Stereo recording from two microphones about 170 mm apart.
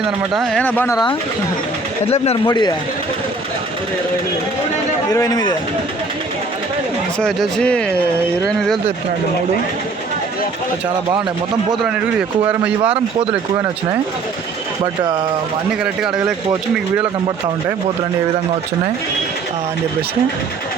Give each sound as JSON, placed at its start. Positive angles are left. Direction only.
{"t": 0.0, "sound": "speech", "side_deg": 0}
{"t": 2.0, "sound": "speech", "side_deg": 40}
{"t": 2.5, "sound": "speech", "side_deg": 25}
{"t": 5.1, "sound": "speech", "side_deg": 20}
{"t": 7.2, "sound": "speech", "side_deg": 5}
{"t": 12.8, "sound": "speech", "side_deg": -35}
{"t": 15.8, "sound": "speech", "side_deg": -5}